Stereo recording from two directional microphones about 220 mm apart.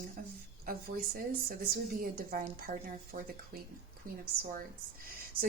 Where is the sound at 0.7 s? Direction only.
40° right (ahead or behind).